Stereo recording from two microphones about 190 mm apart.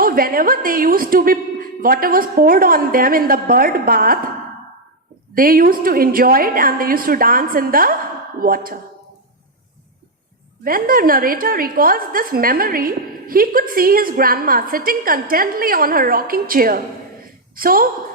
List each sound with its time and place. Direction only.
0.0 s a woman's voice: 50° right (ahead or behind)
5.3 s a woman's voice: 50° right (ahead or behind)
10.6 s a woman's voice: 50° right (ahead or behind)